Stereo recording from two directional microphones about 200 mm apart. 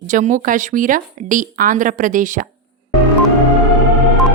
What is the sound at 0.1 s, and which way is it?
Speech, 40° right (ahead or behind).